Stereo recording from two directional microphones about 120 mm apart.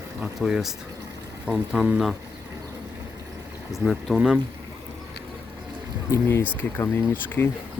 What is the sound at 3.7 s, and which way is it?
Speech, centre (ahead or behind).